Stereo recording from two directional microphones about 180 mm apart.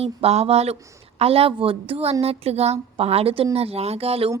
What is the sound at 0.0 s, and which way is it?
Speech, 35° right (ahead or behind).